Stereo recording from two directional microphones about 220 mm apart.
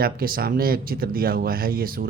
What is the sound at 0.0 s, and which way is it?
Speech, 40° right (ahead or behind).